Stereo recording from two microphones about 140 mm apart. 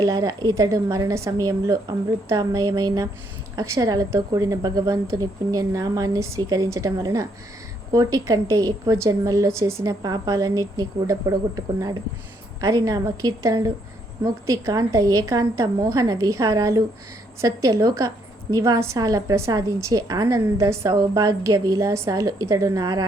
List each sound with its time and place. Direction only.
0.0 s a woman's voice: 25° right (ahead or behind)